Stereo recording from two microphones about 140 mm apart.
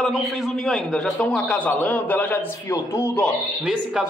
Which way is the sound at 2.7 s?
25° left (ahead or behind).